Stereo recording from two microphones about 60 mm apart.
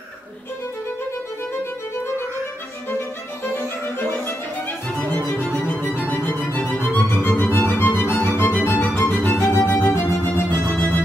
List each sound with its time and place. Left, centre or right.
5.3 s music: left